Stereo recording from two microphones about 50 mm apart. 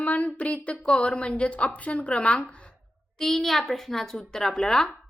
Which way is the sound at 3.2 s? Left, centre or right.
Centre.